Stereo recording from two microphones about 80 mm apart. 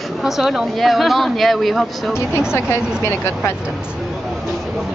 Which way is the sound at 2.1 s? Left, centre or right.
Left.